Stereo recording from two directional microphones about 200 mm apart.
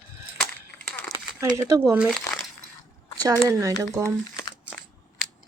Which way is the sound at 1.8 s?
Centre (ahead or behind).